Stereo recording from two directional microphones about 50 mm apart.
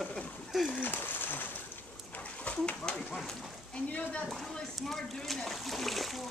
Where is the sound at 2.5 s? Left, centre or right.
Left.